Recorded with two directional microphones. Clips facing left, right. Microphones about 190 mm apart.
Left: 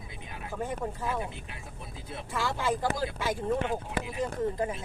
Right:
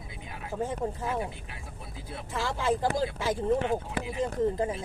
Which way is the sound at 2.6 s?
25° right (ahead or behind).